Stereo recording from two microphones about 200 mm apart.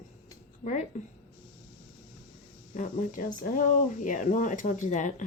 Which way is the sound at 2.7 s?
40° left (ahead or behind).